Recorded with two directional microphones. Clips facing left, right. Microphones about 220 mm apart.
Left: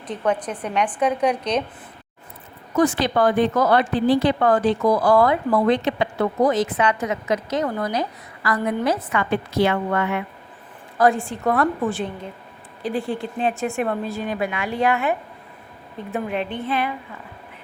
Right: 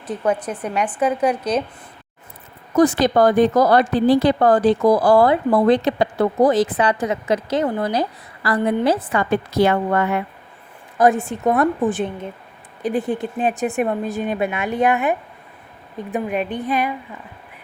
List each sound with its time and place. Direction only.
0.1 s a woman's voice: 10° right (ahead or behind)
2.7 s a woman's voice: 40° right (ahead or behind)
10.9 s a woman's voice: 20° right (ahead or behind)
16.1 s a woman's voice: 15° right (ahead or behind)